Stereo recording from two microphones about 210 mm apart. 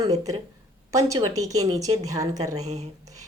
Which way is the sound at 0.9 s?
15° right (ahead or behind).